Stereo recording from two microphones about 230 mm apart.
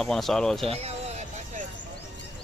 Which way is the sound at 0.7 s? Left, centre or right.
Right.